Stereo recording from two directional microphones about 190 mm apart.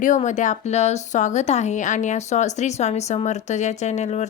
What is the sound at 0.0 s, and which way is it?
A woman's voice, 40° left (ahead or behind).